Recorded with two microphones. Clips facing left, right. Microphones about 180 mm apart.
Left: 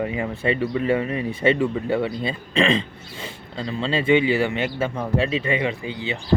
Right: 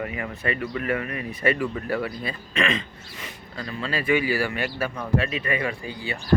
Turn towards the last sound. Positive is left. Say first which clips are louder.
# left 4 dB
turn(degrees=20)  # may be behind; listen again after turning